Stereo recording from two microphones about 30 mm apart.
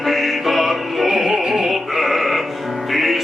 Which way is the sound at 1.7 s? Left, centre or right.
Centre.